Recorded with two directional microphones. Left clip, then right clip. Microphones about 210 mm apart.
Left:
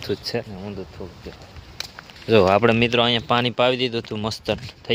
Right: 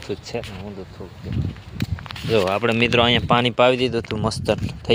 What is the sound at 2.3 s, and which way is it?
Speech, 50° left (ahead or behind).